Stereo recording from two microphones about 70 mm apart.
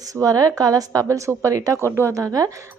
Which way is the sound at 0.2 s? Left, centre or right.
Right.